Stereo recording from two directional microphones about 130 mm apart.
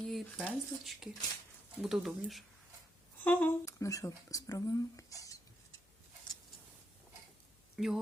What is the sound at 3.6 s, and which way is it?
Speech, 25° left (ahead or behind).